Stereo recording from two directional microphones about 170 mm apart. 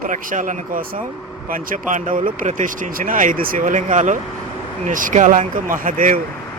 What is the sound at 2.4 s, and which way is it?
Speech, 50° right (ahead or behind).